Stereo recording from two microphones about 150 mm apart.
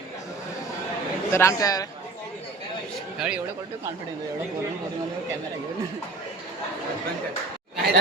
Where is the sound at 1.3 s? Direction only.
20° left (ahead or behind).